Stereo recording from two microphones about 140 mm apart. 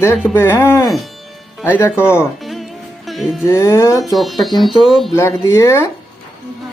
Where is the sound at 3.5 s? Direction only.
20° left (ahead or behind).